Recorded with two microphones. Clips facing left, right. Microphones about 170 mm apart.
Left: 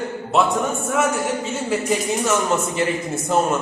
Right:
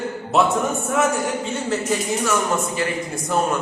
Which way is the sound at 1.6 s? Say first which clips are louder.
Left 2 dB; 15° left (ahead or behind).